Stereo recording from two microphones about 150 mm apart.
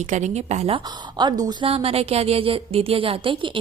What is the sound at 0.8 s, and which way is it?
Speech, 30° right (ahead or behind).